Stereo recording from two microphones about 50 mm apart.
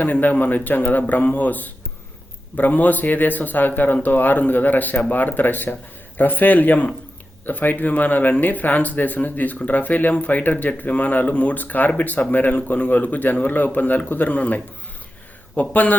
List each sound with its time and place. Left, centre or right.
0.0 s speech: left
15.7 s speech: left